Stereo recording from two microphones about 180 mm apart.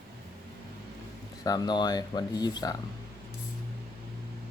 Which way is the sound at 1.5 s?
25° left (ahead or behind).